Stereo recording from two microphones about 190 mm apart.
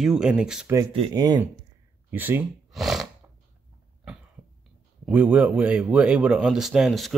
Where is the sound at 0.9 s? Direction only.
25° right (ahead or behind).